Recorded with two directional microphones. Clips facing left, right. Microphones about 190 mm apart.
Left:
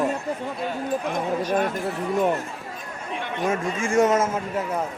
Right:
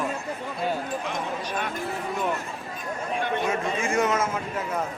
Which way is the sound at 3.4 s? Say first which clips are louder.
Left 2 dB; 45° left (ahead or behind).